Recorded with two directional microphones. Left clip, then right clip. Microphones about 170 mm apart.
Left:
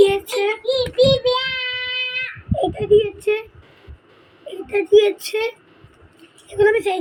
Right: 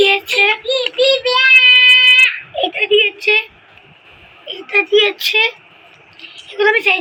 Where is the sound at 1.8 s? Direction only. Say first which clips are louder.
Right 16 dB; 35° left (ahead or behind).